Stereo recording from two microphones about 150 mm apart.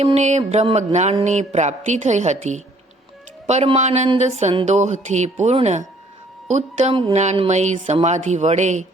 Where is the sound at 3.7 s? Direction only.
50° right (ahead or behind).